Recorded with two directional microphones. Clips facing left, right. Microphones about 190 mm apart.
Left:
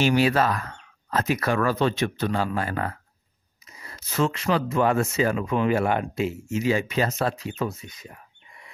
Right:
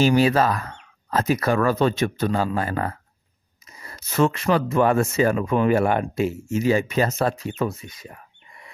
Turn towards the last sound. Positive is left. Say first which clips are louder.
# right 3 dB
turn(degrees=-50)  # may be behind; listen again after turning